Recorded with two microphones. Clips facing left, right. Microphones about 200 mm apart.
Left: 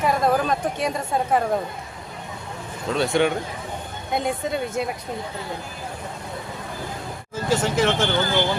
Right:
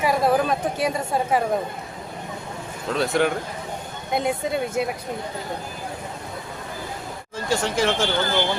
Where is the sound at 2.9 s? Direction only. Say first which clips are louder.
Left 1 dB; centre (ahead or behind).